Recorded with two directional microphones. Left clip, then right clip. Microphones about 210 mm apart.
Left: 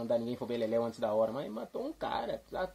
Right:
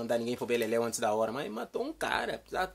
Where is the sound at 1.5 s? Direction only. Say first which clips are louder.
Right 3 dB; 25° right (ahead or behind).